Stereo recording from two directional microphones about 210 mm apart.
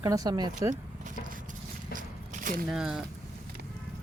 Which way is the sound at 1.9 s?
40° right (ahead or behind).